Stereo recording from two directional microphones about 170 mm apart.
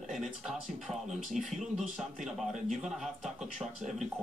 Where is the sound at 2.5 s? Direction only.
45° right (ahead or behind).